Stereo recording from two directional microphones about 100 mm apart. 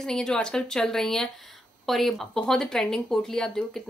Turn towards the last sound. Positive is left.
turn(degrees=5)  # may be behind; listen again after turning